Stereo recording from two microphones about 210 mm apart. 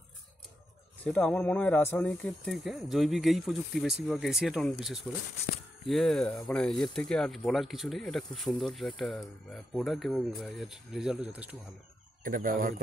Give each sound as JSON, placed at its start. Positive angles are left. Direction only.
{"t": 1.0, "sound": "speech", "side_deg": 5}
{"t": 12.2, "sound": "speech", "side_deg": -40}